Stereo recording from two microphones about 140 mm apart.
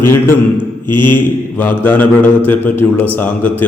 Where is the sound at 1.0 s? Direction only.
15° left (ahead or behind).